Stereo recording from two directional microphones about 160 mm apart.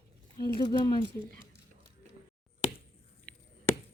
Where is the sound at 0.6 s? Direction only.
25° left (ahead or behind).